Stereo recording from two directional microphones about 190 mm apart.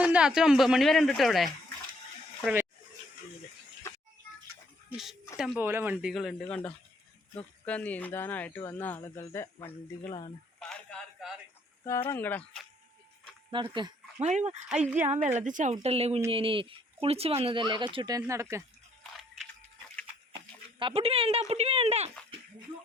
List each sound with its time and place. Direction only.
0.0 s speech: 5° right (ahead or behind)
3.9 s music: 15° left (ahead or behind)
4.9 s speech: centre (ahead or behind); by 10.2 s 15° left (ahead or behind)
10.6 s a sound: 5° left (ahead or behind)
11.8 s speech: 15° left (ahead or behind)
13.5 s speech: 25° right (ahead or behind)
14.2 s speech: 35° right (ahead or behind)
14.8 s a woman's voice: 10° right (ahead or behind)
15.4 s speech: 40° right (ahead or behind); by 18.6 s 15° right (ahead or behind)
20.7 s speech: 30° right (ahead or behind)